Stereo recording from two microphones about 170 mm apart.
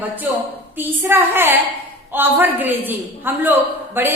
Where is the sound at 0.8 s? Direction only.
15° right (ahead or behind).